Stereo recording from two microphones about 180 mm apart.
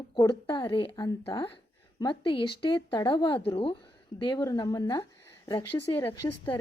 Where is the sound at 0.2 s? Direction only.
25° left (ahead or behind).